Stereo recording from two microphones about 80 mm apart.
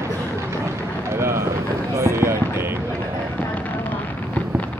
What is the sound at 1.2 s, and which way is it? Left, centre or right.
Run, right.